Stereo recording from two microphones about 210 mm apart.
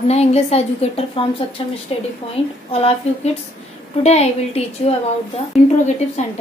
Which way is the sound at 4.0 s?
30° left (ahead or behind).